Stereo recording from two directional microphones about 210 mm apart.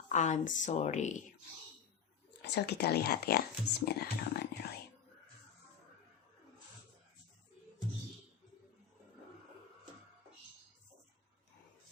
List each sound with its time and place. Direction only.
0.1 s speech: 35° left (ahead or behind)
2.4 s speech: 50° left (ahead or behind)